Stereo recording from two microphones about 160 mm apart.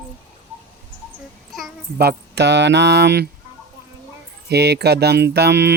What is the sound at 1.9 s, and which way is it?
Speech, 85° right.